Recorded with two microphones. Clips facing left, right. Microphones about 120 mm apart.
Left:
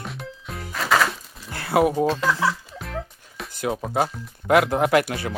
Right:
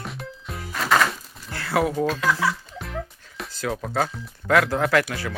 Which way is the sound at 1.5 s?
25° left (ahead or behind).